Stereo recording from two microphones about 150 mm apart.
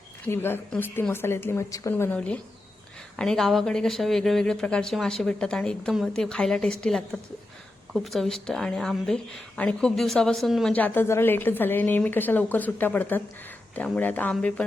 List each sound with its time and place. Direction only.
0.3 s speech: 15° left (ahead or behind)